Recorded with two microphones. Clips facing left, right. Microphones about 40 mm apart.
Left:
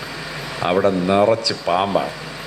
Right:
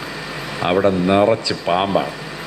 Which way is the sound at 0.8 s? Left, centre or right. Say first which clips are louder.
Right 1 dB; right.